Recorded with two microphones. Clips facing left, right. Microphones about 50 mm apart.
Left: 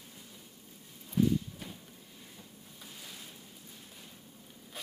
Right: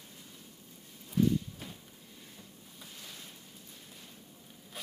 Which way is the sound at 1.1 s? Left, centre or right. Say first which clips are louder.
Even; centre.